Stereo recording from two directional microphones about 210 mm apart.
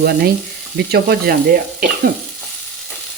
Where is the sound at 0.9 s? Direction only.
45° right (ahead or behind).